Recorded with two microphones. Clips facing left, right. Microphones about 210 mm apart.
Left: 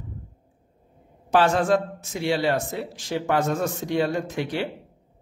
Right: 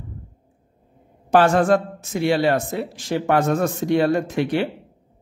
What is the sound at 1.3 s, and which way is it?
Speech, 50° right (ahead or behind).